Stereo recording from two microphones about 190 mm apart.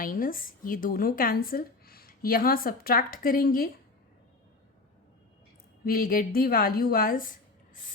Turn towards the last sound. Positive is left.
turn(degrees=45)  # may be behind; listen again after turning